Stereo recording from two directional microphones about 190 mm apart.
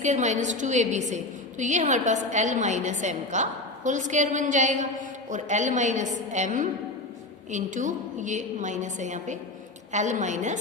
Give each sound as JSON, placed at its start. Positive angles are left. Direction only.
{"t": 0.0, "sound": "a woman's voice", "side_deg": -40}